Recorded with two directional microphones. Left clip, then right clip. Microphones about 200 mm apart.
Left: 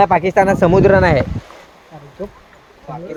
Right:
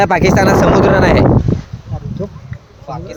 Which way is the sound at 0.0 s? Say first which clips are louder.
Right 1 dB; 50° right (ahead or behind).